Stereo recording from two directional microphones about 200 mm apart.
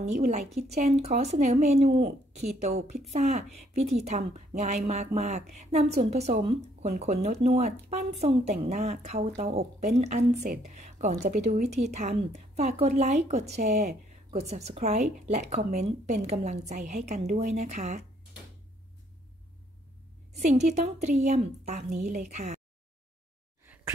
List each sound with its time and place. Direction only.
0.0 s a woman's voice: 35° right (ahead or behind)
20.3 s a woman's voice: 35° right (ahead or behind)
23.6 s a sound: 10° right (ahead or behind)